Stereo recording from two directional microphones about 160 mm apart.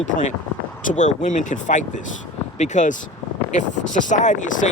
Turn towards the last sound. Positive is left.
turn(degrees=50)  # may be behind; listen again after turning